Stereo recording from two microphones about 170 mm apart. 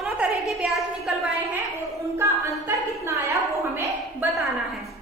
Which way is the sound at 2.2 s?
15° right (ahead or behind).